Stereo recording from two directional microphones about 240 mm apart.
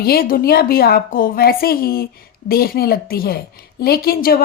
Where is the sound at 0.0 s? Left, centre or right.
Left.